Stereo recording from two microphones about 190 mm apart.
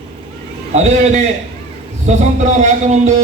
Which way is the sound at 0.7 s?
35° right (ahead or behind).